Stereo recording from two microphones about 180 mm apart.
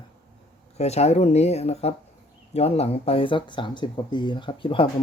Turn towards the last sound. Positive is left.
turn(degrees=30)  # may be behind; listen again after turning